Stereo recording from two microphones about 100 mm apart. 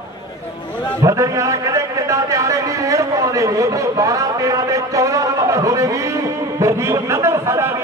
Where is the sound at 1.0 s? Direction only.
35° right (ahead or behind).